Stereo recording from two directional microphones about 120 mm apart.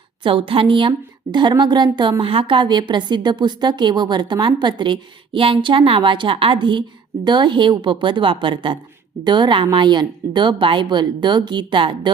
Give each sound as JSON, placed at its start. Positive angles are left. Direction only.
{"t": 0.2, "sound": "a woman's voice", "side_deg": -45}